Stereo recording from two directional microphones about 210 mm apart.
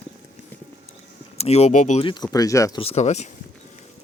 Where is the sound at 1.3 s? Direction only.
30° left (ahead or behind).